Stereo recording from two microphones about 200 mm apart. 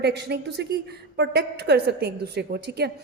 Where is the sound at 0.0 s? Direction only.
55° right (ahead or behind).